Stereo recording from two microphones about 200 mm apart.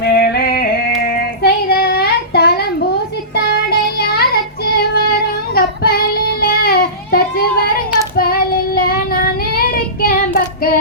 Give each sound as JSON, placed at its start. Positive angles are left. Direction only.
{"t": 0.0, "sound": "female singing", "side_deg": 55}
{"t": 3.3, "sound": "child singing", "side_deg": 55}